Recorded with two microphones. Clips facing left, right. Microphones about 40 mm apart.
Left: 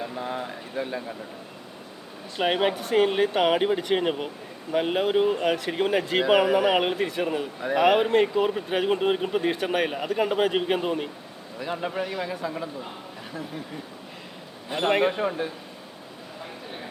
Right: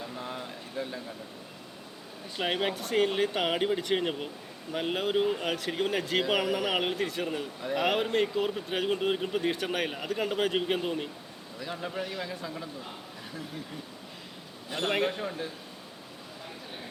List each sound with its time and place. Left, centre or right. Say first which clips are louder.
0.0 s a sound: left 7 dB; left
2.4 s a man's voice: left 6 dB; centre
12.0 s speech: left 6 dB; centre
14.7 s a man's voice: left 6 dB; centre